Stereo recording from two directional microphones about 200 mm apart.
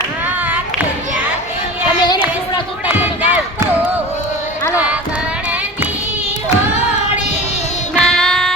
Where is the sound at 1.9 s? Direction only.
20° left (ahead or behind).